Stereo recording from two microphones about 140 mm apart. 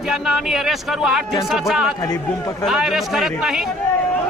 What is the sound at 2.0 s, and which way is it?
Speech, 25° left (ahead or behind).